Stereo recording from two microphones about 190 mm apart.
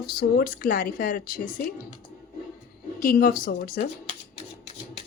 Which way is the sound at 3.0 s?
50° left (ahead or behind).